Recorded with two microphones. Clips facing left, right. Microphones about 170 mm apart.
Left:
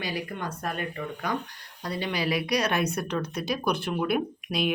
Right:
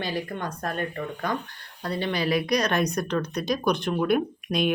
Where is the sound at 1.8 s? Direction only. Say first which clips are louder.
Right 3 dB; 15° left (ahead or behind).